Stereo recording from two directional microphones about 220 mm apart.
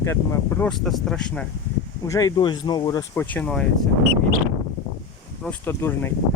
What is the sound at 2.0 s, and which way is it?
Speech, 15° left (ahead or behind).